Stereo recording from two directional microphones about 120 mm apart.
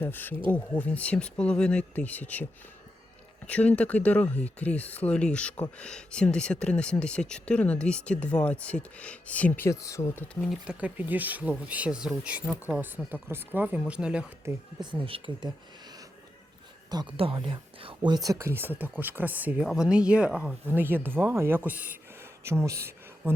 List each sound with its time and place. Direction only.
0.0 s speech: 15° left (ahead or behind)
10.4 s speech: centre (ahead or behind)
10.8 s speech: 15° right (ahead or behind)
15.0 s speech: 50° right (ahead or behind)
17.2 s speech: 50° right (ahead or behind); by 23.3 s 25° right (ahead or behind)